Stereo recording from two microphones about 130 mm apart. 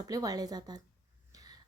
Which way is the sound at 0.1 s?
30° right (ahead or behind).